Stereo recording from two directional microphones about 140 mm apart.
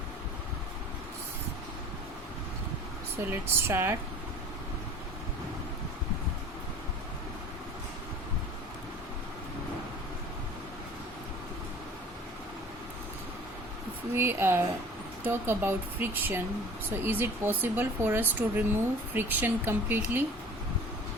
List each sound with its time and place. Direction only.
3.2 s speech: 15° right (ahead or behind)
14.1 s speech: 15° right (ahead or behind)